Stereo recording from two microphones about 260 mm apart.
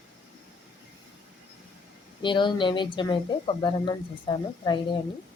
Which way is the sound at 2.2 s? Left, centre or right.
Centre.